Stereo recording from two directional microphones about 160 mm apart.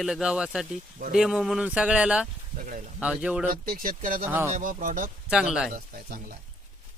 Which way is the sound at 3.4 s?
60° right (ahead or behind).